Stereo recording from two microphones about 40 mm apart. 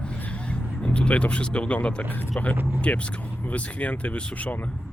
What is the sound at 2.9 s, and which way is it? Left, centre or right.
Speech, left.